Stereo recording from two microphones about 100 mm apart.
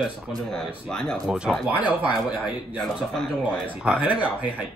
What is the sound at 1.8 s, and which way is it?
Speech, 15° right (ahead or behind).